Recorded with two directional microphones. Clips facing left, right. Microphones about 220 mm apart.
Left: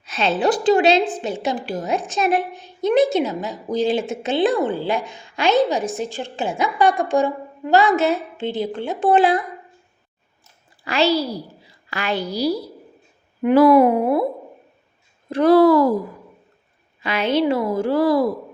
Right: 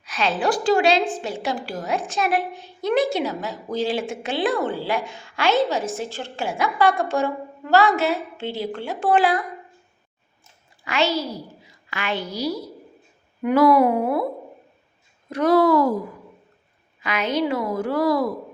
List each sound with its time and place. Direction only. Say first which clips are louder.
0.0 s a woman's voice: left 3 dB; 25° left (ahead or behind)
10.8 s a woman's voice: left 4 dB; 35° left (ahead or behind)
15.3 s speech: left 4 dB; 30° left (ahead or behind)
17.0 s a woman's voice: left 4 dB; 30° left (ahead or behind)